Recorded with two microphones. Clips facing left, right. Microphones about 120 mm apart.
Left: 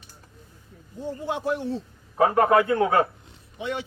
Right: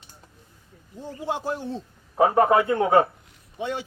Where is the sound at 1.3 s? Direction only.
30° right (ahead or behind).